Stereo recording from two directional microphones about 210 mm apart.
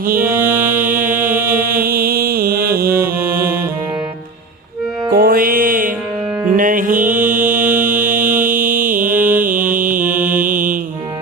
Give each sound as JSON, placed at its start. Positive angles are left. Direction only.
{"t": 0.3, "sound": "music", "side_deg": -10}
{"t": 0.7, "sound": "music", "side_deg": -40}
{"t": 1.5, "sound": "mantra", "side_deg": -40}
{"t": 5.1, "sound": "music", "side_deg": -45}
{"t": 7.3, "sound": "mantra", "side_deg": -40}